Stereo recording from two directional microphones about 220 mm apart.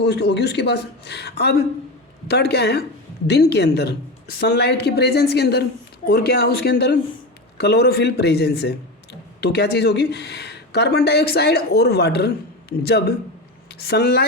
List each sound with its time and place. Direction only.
0.0 s speech: 50° left (ahead or behind)